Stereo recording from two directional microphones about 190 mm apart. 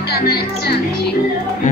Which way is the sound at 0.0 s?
55° left (ahead or behind).